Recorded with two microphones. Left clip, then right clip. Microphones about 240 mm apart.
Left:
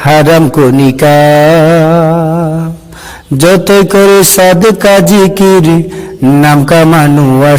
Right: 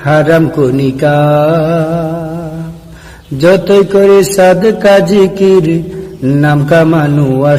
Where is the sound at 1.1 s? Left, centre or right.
Left.